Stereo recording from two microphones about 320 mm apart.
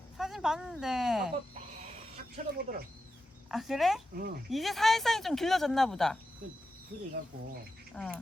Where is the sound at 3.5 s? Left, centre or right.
Centre.